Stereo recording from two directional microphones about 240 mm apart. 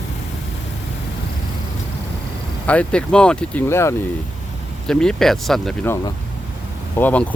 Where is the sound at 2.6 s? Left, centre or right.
Centre.